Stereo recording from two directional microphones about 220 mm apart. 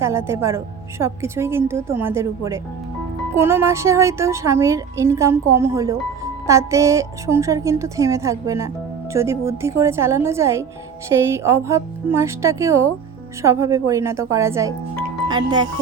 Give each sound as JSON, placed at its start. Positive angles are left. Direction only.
{"t": 0.0, "sound": "a woman's voice", "side_deg": -10}